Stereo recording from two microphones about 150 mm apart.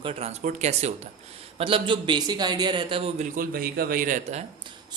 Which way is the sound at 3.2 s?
70° right (ahead or behind).